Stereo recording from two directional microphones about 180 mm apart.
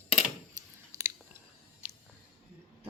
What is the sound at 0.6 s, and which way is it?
Chewing, 20° right (ahead or behind).